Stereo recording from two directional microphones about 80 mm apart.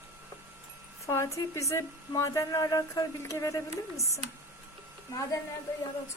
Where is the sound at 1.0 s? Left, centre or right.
Left.